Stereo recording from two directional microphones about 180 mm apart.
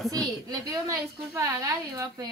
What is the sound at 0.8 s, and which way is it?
A woman's voice, 15° right (ahead or behind).